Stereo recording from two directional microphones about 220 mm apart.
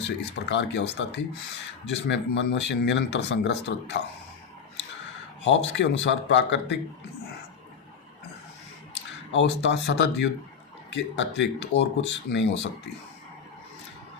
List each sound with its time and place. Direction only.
0.0 s speech: 50° left (ahead or behind)
5.5 s speech: 55° left (ahead or behind)
9.3 s speech: 55° left (ahead or behind)